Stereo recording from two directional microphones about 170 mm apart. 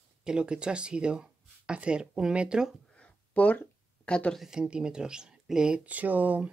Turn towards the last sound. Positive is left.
turn(degrees=-10)  # may be behind; listen again after turning